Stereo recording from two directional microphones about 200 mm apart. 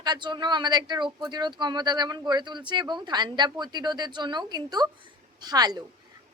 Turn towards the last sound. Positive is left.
turn(degrees=-20)  # may be behind; listen again after turning